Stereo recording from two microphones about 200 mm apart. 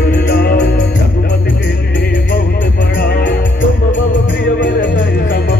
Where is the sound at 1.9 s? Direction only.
45° left (ahead or behind).